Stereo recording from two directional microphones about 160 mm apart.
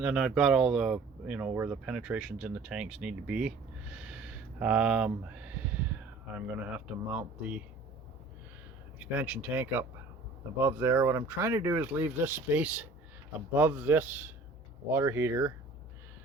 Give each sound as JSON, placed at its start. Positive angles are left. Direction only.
{"t": 0.0, "sound": "speech", "side_deg": -5}
{"t": 9.0, "sound": "speech", "side_deg": -10}